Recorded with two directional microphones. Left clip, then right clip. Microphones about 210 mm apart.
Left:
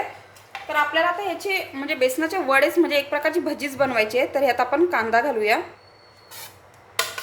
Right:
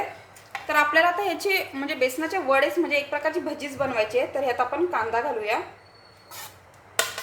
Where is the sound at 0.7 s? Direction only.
30° right (ahead or behind).